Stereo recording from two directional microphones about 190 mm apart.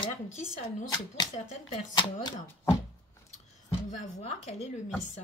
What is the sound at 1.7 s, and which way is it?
Speech, 25° left (ahead or behind).